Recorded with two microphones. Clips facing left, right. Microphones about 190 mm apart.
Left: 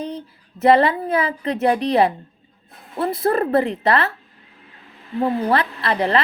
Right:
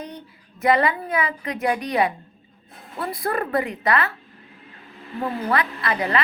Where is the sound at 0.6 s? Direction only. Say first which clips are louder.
Left 5 dB; 30° left (ahead or behind).